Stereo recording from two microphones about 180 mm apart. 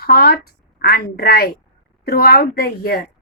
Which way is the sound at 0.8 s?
60° left (ahead or behind).